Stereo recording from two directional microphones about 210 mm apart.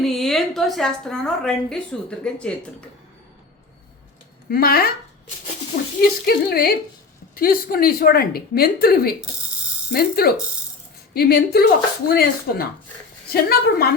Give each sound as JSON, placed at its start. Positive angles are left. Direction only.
{"t": 0.0, "sound": "a woman's voice", "side_deg": 0}
{"t": 4.4, "sound": "a woman's voice", "side_deg": 45}
{"t": 6.0, "sound": "a woman's voice", "side_deg": 45}